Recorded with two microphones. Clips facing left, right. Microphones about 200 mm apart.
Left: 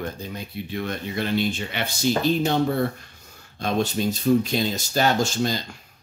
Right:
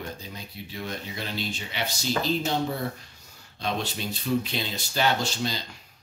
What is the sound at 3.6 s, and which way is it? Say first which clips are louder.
Speech: left 7 dB; 45° left (ahead or behind).